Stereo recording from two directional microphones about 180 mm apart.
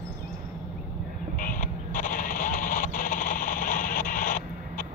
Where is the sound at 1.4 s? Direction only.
50° left (ahead or behind).